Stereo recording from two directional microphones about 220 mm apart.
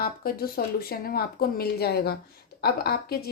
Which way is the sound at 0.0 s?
45° left (ahead or behind).